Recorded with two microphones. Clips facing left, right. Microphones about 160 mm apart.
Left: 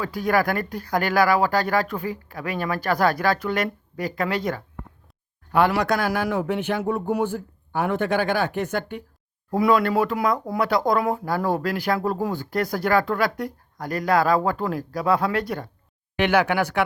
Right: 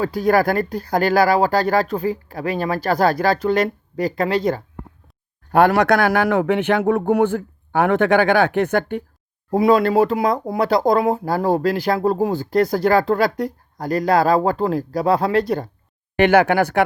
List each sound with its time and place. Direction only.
0.0 s speech: 30° right (ahead or behind)
5.5 s a man's voice: 50° right (ahead or behind)
9.5 s speech: 25° right (ahead or behind)
16.1 s speech: 50° right (ahead or behind)